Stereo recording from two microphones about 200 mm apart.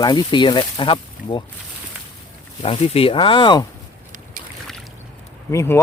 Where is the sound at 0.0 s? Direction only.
20° left (ahead or behind).